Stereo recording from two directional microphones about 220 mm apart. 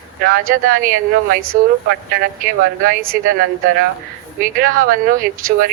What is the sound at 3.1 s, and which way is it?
Speech, 45° right (ahead or behind).